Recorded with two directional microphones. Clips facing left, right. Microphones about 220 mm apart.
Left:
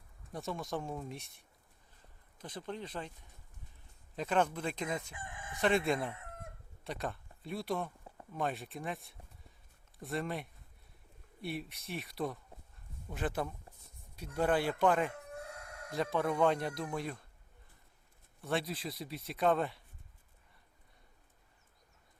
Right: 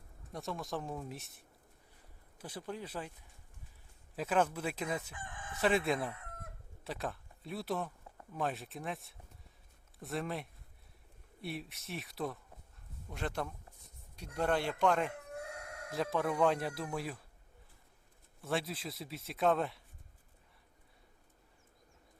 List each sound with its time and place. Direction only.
0.3 s speech: centre (ahead or behind)
4.1 s speech: 5° right (ahead or behind)
5.1 s crowing: 25° left (ahead or behind)
5.5 s speech: 5° right (ahead or behind)
6.0 s chicken: 25° left (ahead or behind)
6.8 s speech: centre (ahead or behind)
18.4 s speech: centre (ahead or behind)